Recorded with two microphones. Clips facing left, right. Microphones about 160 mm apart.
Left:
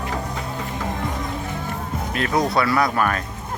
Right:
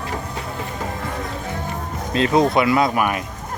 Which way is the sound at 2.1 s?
25° right (ahead or behind).